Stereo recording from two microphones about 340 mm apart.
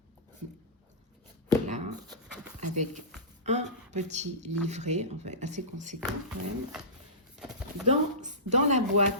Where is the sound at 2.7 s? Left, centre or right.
Right.